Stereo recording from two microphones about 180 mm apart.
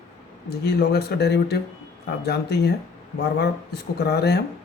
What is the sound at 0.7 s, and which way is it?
Speech, 60° left (ahead or behind).